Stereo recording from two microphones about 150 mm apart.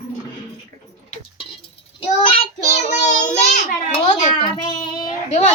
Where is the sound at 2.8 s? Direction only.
55° left (ahead or behind).